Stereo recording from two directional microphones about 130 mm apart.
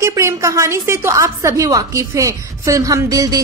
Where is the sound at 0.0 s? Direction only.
25° right (ahead or behind).